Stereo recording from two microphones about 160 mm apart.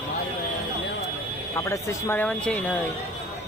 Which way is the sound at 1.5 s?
20° left (ahead or behind).